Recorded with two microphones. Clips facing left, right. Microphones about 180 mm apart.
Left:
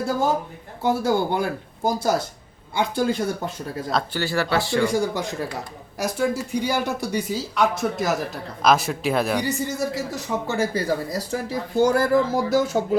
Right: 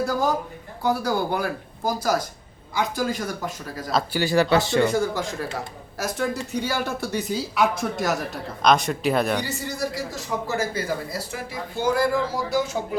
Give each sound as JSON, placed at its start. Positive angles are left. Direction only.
{"t": 0.8, "sound": "a man's voice", "side_deg": 25}
{"t": 3.9, "sound": "speech", "side_deg": -10}
{"t": 4.9, "sound": "speech", "side_deg": 15}
{"t": 7.3, "sound": "speech", "side_deg": 0}
{"t": 9.4, "sound": "a man's voice", "side_deg": 20}